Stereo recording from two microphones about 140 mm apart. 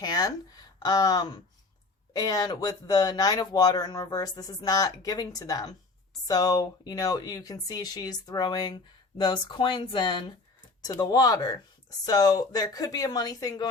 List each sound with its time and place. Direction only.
0.0 s speech: 25° left (ahead or behind)